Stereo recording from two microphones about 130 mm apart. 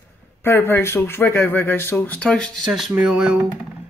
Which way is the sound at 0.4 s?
15° left (ahead or behind).